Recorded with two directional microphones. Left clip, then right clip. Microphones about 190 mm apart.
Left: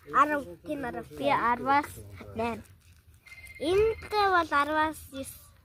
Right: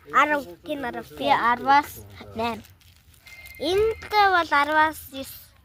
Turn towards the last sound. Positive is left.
turn(degrees=-40)  # may be behind; listen again after turning